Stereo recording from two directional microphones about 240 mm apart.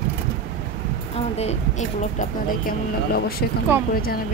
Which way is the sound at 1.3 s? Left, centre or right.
Left.